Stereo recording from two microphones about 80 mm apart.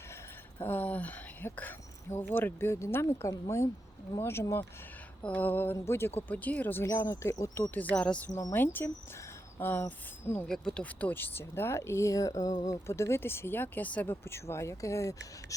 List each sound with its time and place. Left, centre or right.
0.6 s speech: left
5.2 s speech: left
6.3 s speech: centre
6.8 s speech: left
7.6 s speech: left
8.5 s speech: left
10.5 s speech: centre
14.3 s speech: left